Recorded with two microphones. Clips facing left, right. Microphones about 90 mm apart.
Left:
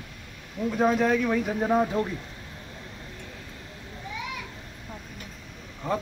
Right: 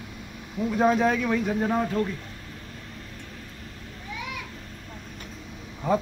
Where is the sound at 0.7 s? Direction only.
5° right (ahead or behind).